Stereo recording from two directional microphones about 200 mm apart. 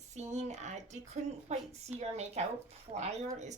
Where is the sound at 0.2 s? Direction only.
35° right (ahead or behind).